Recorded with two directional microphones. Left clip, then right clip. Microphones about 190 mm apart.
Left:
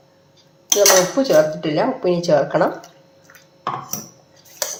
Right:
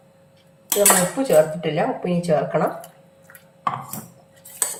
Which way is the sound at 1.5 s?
35° left (ahead or behind).